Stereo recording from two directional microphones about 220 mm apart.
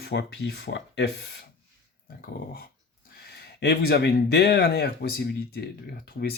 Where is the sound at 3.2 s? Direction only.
45° left (ahead or behind).